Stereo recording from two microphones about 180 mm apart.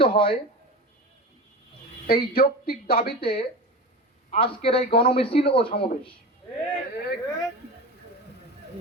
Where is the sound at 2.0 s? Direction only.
55° left (ahead or behind).